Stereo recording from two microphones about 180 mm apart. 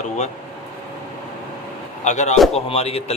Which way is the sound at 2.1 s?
40° left (ahead or behind).